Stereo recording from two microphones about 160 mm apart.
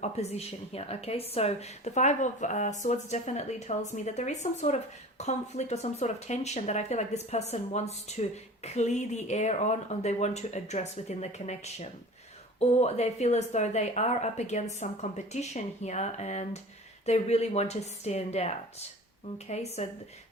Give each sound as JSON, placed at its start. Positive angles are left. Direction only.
{"t": 0.0, "sound": "speech", "side_deg": 40}